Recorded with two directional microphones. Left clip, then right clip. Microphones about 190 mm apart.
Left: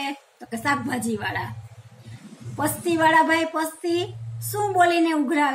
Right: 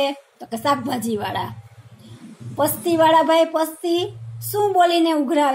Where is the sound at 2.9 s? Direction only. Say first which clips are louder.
Right 3 dB; 25° right (ahead or behind).